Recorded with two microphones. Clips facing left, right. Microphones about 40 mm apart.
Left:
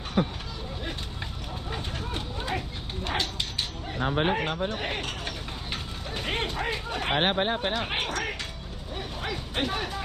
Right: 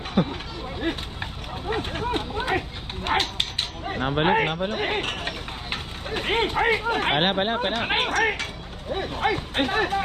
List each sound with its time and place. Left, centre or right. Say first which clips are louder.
0.8 s a sound: right 10 dB; right
1.7 s dog: right 9 dB; right
4.3 s speech: right 5 dB; right